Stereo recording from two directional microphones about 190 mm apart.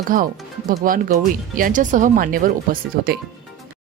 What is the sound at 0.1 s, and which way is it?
Speech, 45° right (ahead or behind).